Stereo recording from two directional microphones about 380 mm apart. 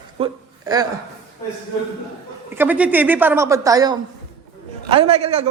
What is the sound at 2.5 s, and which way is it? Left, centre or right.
A woman's voice, centre.